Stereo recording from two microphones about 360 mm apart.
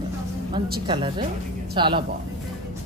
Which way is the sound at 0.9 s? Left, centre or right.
Centre.